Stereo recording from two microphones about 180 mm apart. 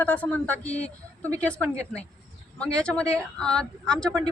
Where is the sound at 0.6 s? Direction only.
40° left (ahead or behind).